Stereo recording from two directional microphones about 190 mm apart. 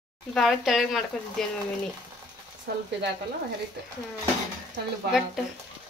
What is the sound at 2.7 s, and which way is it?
Speech, 60° right (ahead or behind).